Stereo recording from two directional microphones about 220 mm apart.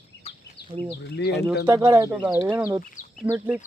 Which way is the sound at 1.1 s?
50° left (ahead or behind).